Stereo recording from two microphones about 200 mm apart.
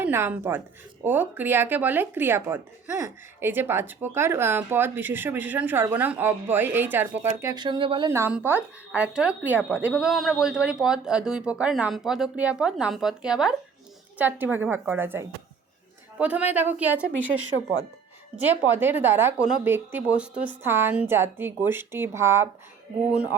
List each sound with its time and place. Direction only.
0.0 s speech: 10° right (ahead or behind)
7.5 s speech: 20° right (ahead or behind)
8.1 s a man's voice: 10° right (ahead or behind)
18.3 s speech: 10° right (ahead or behind)